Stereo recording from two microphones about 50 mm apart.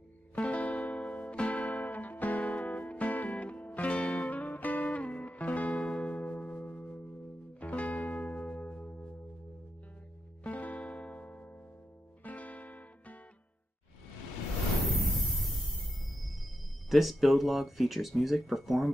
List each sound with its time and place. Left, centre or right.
0.4 s music: left
10.4 s music: left
15.0 s music: centre
16.9 s speech: centre